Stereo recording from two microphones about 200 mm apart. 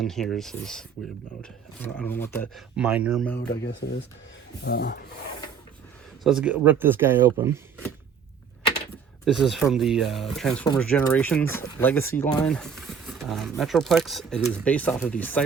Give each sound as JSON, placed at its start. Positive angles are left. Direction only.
{"t": 0.0, "sound": "speech", "side_deg": 0}
{"t": 2.7, "sound": "speech", "side_deg": -5}
{"t": 3.6, "sound": "speech", "side_deg": 60}
{"t": 6.2, "sound": "speech", "side_deg": -5}
{"t": 9.2, "sound": "speech", "side_deg": 0}